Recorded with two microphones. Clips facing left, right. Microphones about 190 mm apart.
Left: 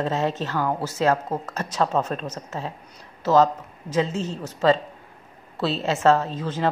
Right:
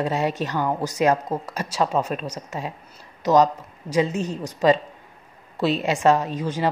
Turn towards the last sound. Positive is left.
turn(degrees=-10)  # may be behind; listen again after turning